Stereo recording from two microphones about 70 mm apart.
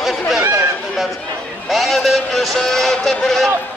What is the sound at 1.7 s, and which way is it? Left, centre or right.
Speech, centre.